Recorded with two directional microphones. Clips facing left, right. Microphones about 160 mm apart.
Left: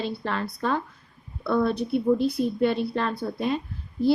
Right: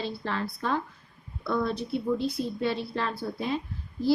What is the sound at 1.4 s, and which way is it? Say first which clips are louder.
A woman's voice: left 5 dB; 65° left (ahead or behind).